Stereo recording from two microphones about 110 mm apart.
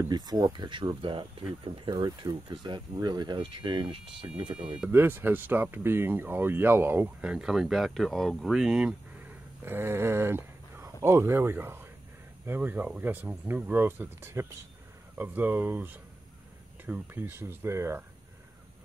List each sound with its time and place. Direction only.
0.1 s speech: 40° right (ahead or behind)
1.9 s speech: 35° right (ahead or behind)
4.2 s speech: 35° right (ahead or behind)
4.8 s speech: 20° right (ahead or behind)
9.7 s speech: 20° right (ahead or behind)